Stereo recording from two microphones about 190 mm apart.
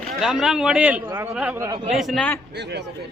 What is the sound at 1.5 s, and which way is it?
Speech, 20° right (ahead or behind).